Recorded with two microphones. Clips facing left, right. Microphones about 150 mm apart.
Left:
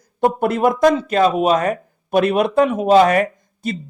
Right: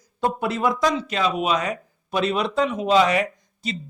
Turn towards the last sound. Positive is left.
turn(degrees=50)  # may be behind; listen again after turning